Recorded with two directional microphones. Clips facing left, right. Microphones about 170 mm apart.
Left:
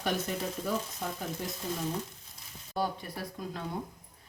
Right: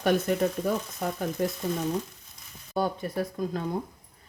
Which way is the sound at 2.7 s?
50° right (ahead or behind).